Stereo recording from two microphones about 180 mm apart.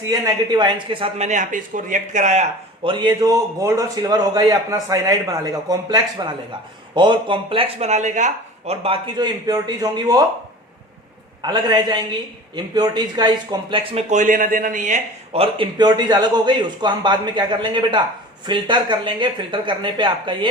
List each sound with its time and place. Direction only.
0.0 s speech: 20° right (ahead or behind); by 2.5 s 40° right (ahead or behind)
2.8 s a man's voice: 25° right (ahead or behind)
11.4 s a man's voice: 25° right (ahead or behind)